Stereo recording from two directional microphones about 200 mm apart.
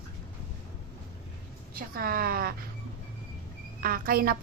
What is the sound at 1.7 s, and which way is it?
Speech, 45° right (ahead or behind).